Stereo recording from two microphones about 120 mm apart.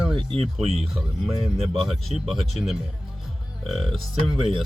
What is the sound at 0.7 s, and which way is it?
Speech, centre (ahead or behind).